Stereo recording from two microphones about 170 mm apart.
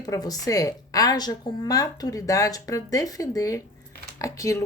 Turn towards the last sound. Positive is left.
turn(degrees=20)  # may be behind; listen again after turning